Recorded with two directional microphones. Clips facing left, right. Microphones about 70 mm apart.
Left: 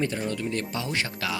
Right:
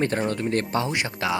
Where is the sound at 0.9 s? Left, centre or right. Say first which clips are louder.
Right 4 dB; right.